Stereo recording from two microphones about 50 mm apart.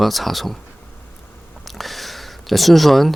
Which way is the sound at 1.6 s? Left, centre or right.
Centre.